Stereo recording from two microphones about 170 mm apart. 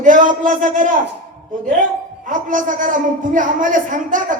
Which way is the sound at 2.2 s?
50° right (ahead or behind).